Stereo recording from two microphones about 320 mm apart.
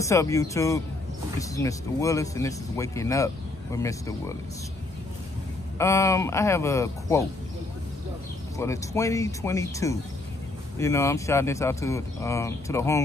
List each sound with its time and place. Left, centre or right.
0.0 s speech: centre
5.8 s speech: centre
8.5 s speech: centre